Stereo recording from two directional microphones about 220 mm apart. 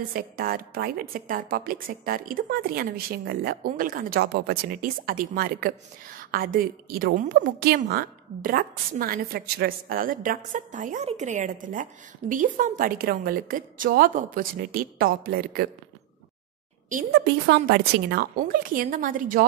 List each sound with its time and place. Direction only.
0.1 s a woman's voice: 40° right (ahead or behind)
17.1 s a woman's voice: 50° right (ahead or behind)